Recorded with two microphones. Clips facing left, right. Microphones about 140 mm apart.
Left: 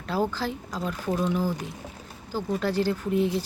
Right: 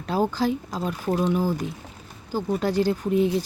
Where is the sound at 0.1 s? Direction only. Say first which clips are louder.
Right 4 dB; 15° right (ahead or behind).